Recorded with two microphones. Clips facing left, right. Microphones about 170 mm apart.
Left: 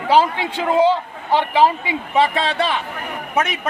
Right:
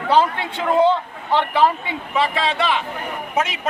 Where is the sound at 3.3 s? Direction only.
55° left (ahead or behind).